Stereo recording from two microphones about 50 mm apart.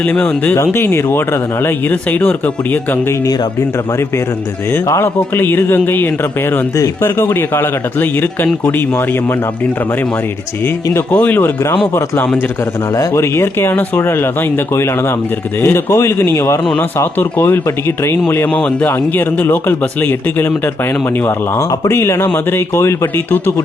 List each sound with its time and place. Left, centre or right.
0.5 s a man's voice: left
1.9 s speech: left
4.9 s a man's voice: left
7.0 s a man's voice: left
11.1 s speech: left
13.0 s speech: left
17.0 s a man's voice: left
18.4 s speech: left
18.9 s speech: left
21.9 s speech: left
22.3 s speech: left